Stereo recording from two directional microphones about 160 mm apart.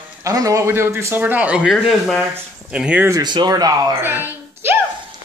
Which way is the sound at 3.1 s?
25° right (ahead or behind).